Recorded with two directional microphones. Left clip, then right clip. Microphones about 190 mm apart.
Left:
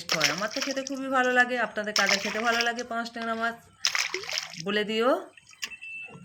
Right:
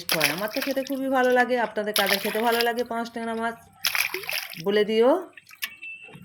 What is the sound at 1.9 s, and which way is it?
Speech, 50° right (ahead or behind).